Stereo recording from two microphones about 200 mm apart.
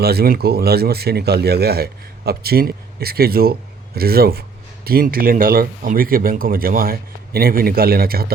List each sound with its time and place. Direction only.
0.0 s speech: 50° right (ahead or behind)